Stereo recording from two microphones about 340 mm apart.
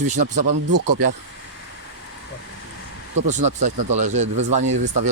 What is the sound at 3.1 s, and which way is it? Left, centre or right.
Speech, right.